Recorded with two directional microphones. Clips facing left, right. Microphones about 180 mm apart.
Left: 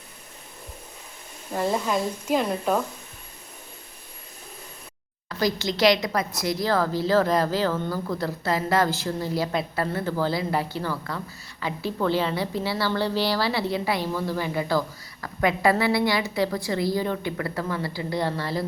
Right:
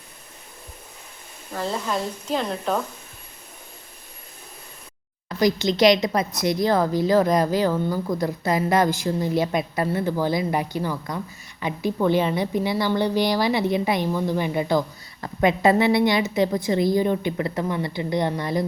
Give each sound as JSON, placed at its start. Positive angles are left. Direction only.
{"t": 1.5, "sound": "speech", "side_deg": 15}
{"t": 5.3, "sound": "a woman's voice", "side_deg": -15}